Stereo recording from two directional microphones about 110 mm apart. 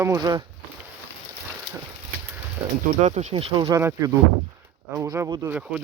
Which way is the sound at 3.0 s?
90° right.